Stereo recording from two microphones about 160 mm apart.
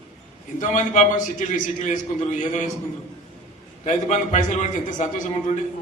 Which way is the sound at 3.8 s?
45° left (ahead or behind).